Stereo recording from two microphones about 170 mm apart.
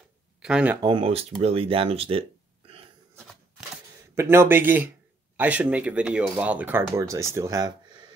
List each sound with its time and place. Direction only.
0.4 s speech: 5° right (ahead or behind)
0.7 s speech: 25° right (ahead or behind)
4.1 s speech: 15° right (ahead or behind)